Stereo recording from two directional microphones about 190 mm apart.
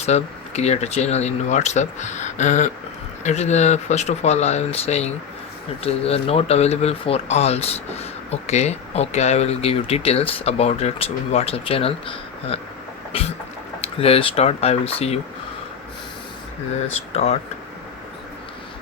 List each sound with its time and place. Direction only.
0.0 s speech: 35° left (ahead or behind)
13.1 s vehicle: 30° left (ahead or behind)
13.8 s speech: 30° left (ahead or behind)